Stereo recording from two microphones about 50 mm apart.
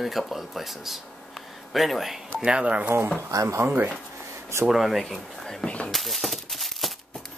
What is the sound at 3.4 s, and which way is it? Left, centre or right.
Speech, right.